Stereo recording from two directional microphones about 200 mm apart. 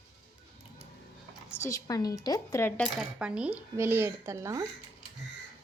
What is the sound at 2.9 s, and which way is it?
A woman's voice, 5° right (ahead or behind).